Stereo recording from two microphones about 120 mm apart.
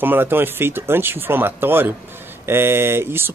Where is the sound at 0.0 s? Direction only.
15° right (ahead or behind).